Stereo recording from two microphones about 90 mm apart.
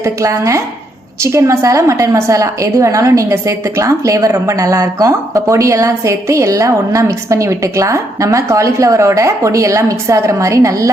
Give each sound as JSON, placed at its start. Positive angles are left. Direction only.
{"t": 0.0, "sound": "a woman's voice", "side_deg": -35}